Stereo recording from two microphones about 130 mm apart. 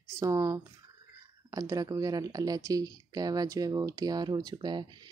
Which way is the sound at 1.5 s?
25° right (ahead or behind).